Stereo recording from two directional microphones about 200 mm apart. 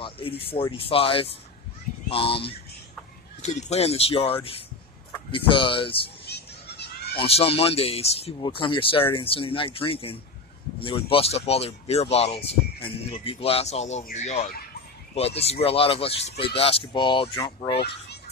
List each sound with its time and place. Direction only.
0.4 s speech: 30° left (ahead or behind)
6.2 s a sound: 55° left (ahead or behind)
7.2 s speech: 30° left (ahead or behind)